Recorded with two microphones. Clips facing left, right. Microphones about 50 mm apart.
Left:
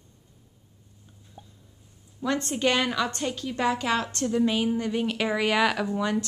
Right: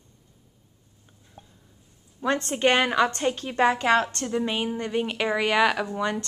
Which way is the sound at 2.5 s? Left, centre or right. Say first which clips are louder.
Right 4 dB; right.